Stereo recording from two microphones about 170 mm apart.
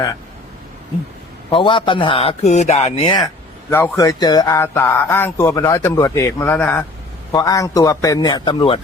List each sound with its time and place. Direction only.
1.5 s a man's voice: 30° left (ahead or behind)
3.7 s speech: 15° left (ahead or behind)